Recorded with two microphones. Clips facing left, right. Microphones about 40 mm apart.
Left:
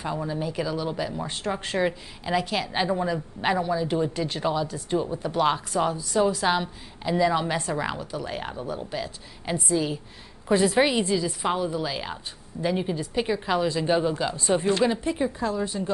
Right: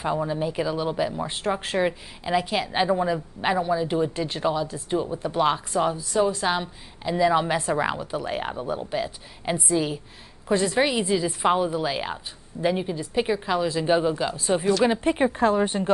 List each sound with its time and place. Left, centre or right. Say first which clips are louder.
0.0 s speech: right 4 dB; centre
10.5 s speech: left 1 dB; centre
11.1 s a woman's voice: right 3 dB; centre
12.7 s speech: even; centre
13.1 s speech: right 3 dB; centre
13.5 s speech: left 1 dB; centre
15.0 s speech: right 5 dB; right